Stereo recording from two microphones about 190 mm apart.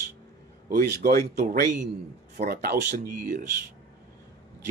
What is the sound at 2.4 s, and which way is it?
Speech, 55° right (ahead or behind).